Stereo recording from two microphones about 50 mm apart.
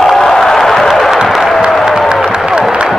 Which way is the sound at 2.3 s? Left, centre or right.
Centre.